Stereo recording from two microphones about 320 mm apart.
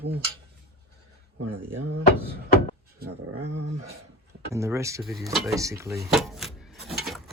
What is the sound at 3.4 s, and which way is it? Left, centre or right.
Dog, right.